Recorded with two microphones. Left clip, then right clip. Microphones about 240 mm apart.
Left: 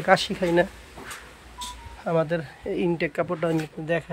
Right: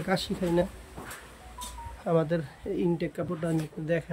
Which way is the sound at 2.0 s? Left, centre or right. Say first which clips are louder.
Left 3 dB; centre.